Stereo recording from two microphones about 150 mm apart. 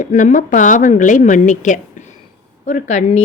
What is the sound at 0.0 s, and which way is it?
A woman's voice, 55° left (ahead or behind).